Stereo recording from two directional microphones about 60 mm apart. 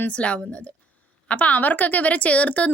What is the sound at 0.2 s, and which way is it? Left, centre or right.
A woman's voice, left.